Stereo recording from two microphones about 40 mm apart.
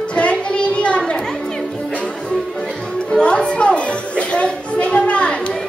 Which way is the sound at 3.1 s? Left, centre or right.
Left.